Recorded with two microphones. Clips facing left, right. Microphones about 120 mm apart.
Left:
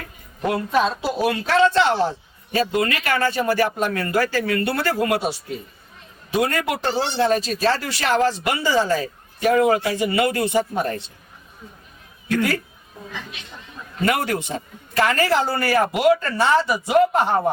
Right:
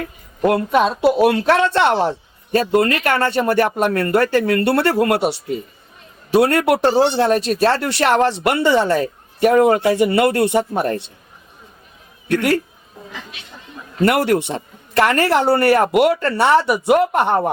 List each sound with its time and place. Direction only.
0.8 s a man's voice: 60° right (ahead or behind)
14.1 s a man's voice: 65° right (ahead or behind)